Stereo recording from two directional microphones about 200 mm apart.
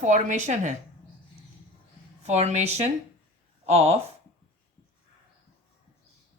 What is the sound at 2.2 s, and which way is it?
A woman's voice, 35° right (ahead or behind).